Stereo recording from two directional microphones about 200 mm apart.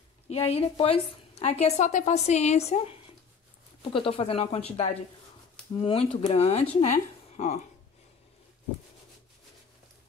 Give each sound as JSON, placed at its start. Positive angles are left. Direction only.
{"t": 0.3, "sound": "a woman's voice", "side_deg": 30}
{"t": 3.9, "sound": "a woman's voice", "side_deg": 30}